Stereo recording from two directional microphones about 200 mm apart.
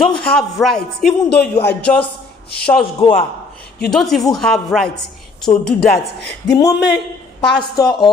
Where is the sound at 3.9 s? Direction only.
Centre (ahead or behind).